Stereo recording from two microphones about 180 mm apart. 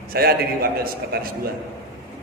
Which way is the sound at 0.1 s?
60° right (ahead or behind).